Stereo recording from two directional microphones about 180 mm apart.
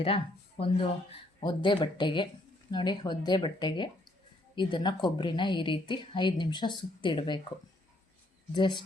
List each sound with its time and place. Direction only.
0.6 s a woman's voice: 30° left (ahead or behind)
8.5 s a woman's voice: 25° left (ahead or behind)